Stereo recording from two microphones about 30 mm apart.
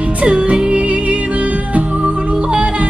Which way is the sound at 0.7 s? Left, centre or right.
Right.